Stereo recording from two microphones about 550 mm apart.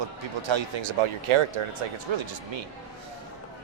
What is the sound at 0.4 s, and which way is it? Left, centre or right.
A man's voice, right.